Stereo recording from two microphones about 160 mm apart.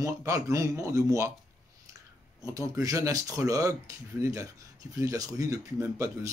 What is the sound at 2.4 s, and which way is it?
Speech, 20° right (ahead or behind).